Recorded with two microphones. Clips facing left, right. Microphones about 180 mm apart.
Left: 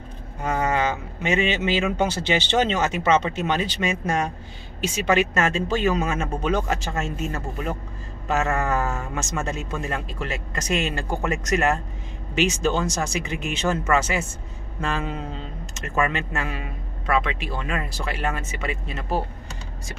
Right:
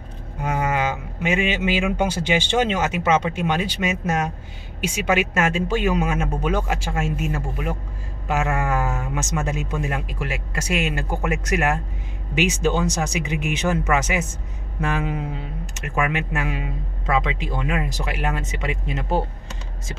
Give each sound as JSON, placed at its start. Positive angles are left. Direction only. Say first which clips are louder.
{"t": 0.4, "sound": "speech", "louder": "even", "side_deg": -10}